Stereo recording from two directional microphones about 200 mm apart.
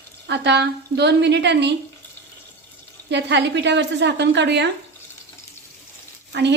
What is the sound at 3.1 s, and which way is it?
Speech, 60° right (ahead or behind).